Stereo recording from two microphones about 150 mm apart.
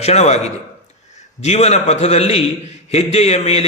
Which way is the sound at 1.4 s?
45° left (ahead or behind).